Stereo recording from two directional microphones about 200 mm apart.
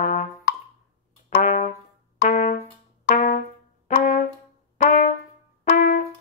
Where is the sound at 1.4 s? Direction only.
35° left (ahead or behind).